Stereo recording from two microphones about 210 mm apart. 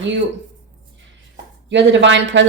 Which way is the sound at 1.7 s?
60° right (ahead or behind).